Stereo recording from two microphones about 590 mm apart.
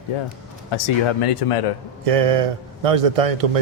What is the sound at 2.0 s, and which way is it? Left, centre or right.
A man's voice, right.